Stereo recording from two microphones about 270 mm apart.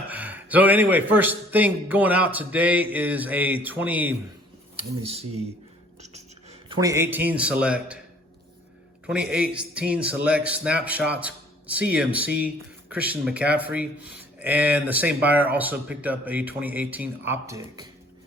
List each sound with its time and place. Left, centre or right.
0.1 s a sound: centre
1.1 s a man's voice: centre
4.8 s speech: right; by 8.0 s centre
9.3 s speech: centre